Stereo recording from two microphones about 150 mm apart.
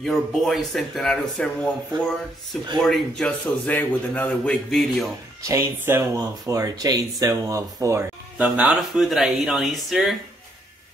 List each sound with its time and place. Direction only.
0.0 s a man's voice: centre (ahead or behind)
5.4 s speech: 20° right (ahead or behind); by 10.1 s centre (ahead or behind)